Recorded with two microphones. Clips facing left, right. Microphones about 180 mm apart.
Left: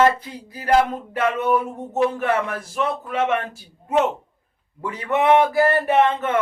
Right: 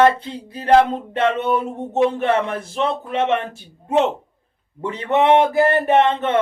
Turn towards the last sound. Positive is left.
turn(degrees=-25)  # may be behind; listen again after turning